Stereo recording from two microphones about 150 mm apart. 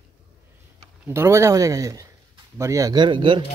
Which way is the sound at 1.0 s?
15° right (ahead or behind).